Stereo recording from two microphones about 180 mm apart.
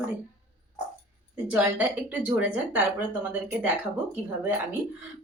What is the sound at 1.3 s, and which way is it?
Speech, 5° right (ahead or behind).